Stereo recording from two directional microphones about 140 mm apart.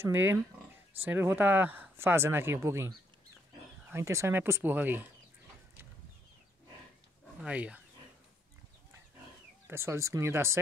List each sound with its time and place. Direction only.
0.0 s speech: 15° right (ahead or behind)
3.9 s speech: 20° right (ahead or behind)
7.3 s speech: 10° right (ahead or behind)
9.7 s speech: 20° right (ahead or behind)